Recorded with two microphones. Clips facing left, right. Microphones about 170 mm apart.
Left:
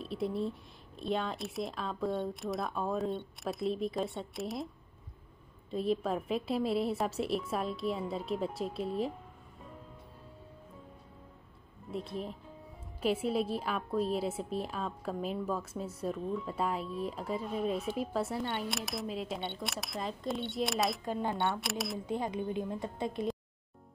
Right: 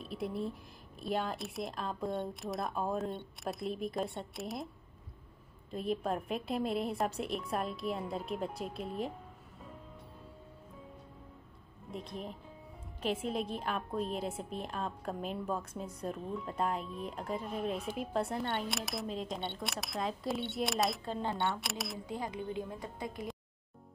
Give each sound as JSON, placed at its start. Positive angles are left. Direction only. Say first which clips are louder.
{"t": 0.0, "sound": "speech", "louder": "left 3 dB", "side_deg": 0}
{"t": 5.7, "sound": "speech", "louder": "left 3 dB", "side_deg": 0}
{"t": 11.9, "sound": "speech", "louder": "left 4 dB", "side_deg": 5}
{"t": 21.0, "sound": "speech", "louder": "left 2 dB", "side_deg": 15}
{"t": 21.5, "sound": "speech", "louder": "left 3 dB", "side_deg": 0}
{"t": 22.0, "sound": "a woman's voice", "louder": "left 4 dB", "side_deg": 20}